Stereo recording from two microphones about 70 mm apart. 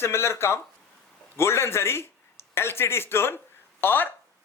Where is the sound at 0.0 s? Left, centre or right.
Left.